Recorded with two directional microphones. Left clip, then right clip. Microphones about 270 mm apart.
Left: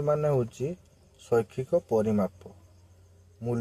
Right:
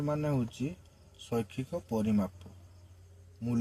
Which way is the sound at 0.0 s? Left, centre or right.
Left.